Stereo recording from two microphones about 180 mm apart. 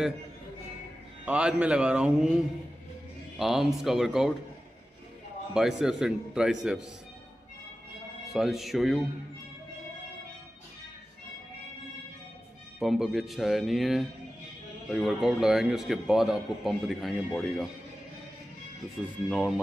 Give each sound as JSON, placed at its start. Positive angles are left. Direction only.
{"t": 1.2, "sound": "a man's voice", "side_deg": -5}
{"t": 5.5, "sound": "a man's voice", "side_deg": -5}
{"t": 8.3, "sound": "a man's voice", "side_deg": 0}
{"t": 12.7, "sound": "a man's voice", "side_deg": 0}
{"t": 19.2, "sound": "a man's voice", "side_deg": -5}